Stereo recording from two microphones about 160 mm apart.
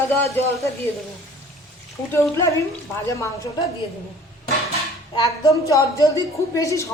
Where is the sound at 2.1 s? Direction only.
15° left (ahead or behind).